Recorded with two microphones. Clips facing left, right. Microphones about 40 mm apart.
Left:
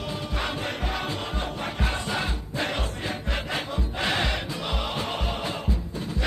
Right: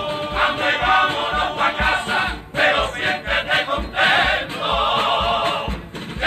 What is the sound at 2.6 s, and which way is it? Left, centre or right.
Music, right.